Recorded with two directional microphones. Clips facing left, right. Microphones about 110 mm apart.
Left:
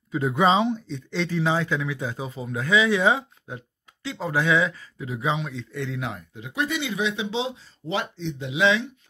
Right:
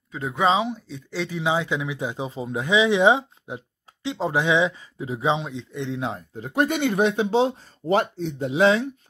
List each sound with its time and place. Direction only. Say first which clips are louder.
0.1 s speech: left 1 dB; centre (ahead or behind); by 8.9 s 45° right (ahead or behind)